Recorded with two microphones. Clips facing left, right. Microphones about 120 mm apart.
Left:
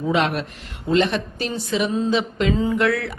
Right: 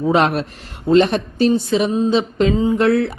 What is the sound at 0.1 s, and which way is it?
A woman's voice, 40° right (ahead or behind).